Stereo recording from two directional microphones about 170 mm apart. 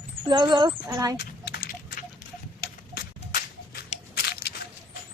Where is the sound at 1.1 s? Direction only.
70° left (ahead or behind).